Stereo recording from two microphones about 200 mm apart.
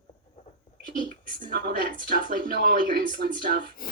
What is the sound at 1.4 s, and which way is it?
Speech, 50° right (ahead or behind).